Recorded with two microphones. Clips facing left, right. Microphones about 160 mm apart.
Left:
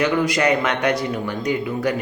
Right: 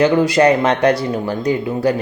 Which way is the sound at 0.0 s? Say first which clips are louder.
Right 6 dB; 30° right (ahead or behind).